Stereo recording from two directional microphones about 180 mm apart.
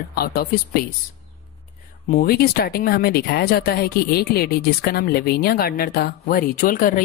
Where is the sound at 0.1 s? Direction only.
55° left (ahead or behind).